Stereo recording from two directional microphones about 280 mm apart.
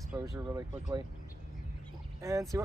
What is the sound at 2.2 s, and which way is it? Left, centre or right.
Speech, centre.